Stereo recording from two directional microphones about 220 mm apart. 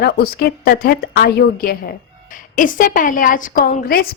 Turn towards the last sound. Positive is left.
turn(degrees=40)  # may be behind; listen again after turning